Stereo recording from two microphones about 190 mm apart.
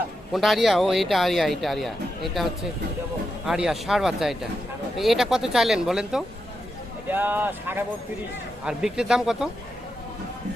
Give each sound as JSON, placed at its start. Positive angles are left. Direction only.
{"t": 0.3, "sound": "speech", "side_deg": 0}